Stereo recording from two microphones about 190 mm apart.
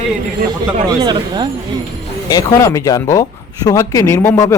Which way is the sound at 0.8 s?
20° right (ahead or behind).